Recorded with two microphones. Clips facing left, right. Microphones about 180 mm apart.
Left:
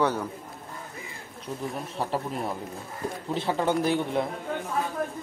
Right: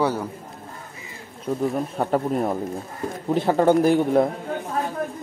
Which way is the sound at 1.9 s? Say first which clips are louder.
Right 5 dB; 55° right (ahead or behind).